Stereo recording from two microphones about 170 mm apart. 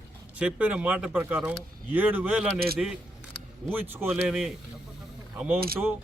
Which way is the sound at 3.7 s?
10° right (ahead or behind).